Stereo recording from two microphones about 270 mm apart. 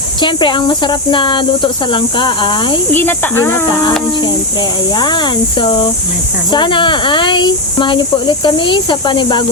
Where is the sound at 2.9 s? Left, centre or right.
Centre.